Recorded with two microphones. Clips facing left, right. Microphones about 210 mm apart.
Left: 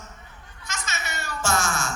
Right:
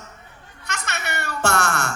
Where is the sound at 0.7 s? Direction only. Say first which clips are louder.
Right 4 dB; 65° right (ahead or behind).